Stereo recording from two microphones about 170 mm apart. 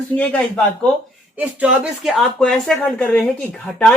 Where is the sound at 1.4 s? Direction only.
5° right (ahead or behind).